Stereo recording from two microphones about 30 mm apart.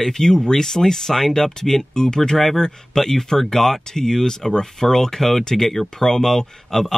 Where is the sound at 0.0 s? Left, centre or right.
Centre.